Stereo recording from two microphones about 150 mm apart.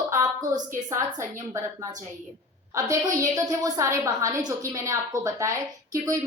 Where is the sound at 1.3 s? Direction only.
20° right (ahead or behind).